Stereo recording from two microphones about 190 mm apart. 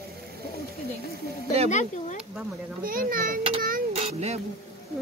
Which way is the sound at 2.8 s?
50° right (ahead or behind).